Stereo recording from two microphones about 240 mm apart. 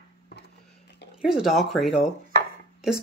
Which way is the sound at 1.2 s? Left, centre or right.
Centre.